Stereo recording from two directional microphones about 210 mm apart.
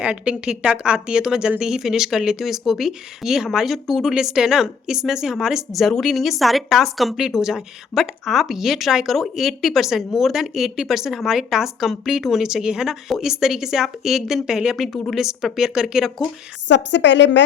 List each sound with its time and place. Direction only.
0.0 s a woman's voice: 5° right (ahead or behind)
16.6 s a woman's voice: 55° left (ahead or behind)